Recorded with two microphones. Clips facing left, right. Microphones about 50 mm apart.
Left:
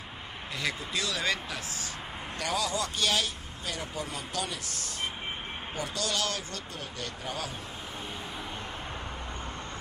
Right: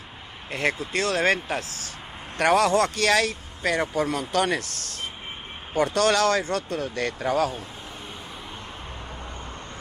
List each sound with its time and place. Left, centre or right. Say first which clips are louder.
0.5 s speech: right 8 dB; right